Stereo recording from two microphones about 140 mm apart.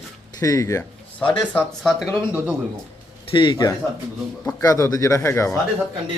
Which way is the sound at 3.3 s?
30° left (ahead or behind).